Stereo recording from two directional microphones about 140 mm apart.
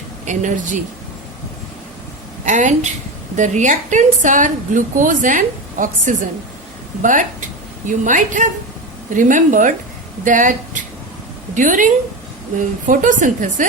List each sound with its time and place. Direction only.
0.3 s a woman's voice: 60° right (ahead or behind)
2.4 s a woman's voice: 60° right (ahead or behind)